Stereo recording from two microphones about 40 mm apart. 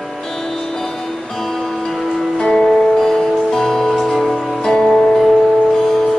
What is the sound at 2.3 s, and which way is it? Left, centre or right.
Music, centre.